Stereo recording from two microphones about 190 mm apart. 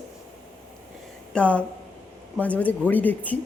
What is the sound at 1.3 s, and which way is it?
Speech, 5° left (ahead or behind).